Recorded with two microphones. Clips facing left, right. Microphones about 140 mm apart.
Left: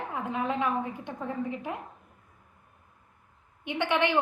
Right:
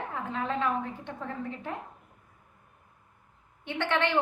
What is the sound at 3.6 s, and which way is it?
Speech, 15° left (ahead or behind).